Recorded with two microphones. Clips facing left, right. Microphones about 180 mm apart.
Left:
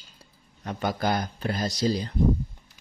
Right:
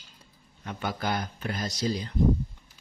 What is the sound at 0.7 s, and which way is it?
Speech, 40° left (ahead or behind).